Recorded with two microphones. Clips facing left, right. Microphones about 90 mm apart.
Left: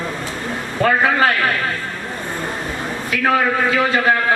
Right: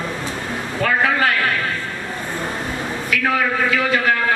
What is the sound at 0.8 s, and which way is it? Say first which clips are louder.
Speech: left 4 dB; 30° left (ahead or behind).